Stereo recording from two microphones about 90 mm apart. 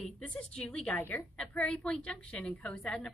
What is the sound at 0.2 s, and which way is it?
Speech, 10° left (ahead or behind).